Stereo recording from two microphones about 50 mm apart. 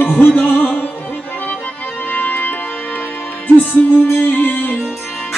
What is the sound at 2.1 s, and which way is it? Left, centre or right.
Organ, left.